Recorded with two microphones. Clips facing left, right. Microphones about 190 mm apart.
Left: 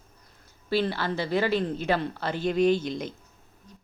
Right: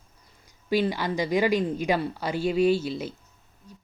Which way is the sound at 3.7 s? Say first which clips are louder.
Right 3 dB; 10° right (ahead or behind).